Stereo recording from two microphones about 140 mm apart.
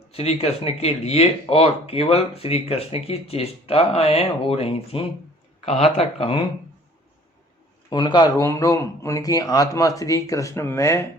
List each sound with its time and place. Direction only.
0.1 s speech: 45° left (ahead or behind)
7.9 s a man's voice: 30° left (ahead or behind)